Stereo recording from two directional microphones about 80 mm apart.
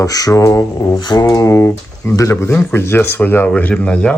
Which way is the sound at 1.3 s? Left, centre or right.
Left.